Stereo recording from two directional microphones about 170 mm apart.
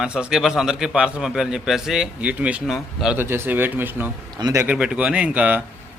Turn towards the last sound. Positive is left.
turn(degrees=-10)  # may be behind; listen again after turning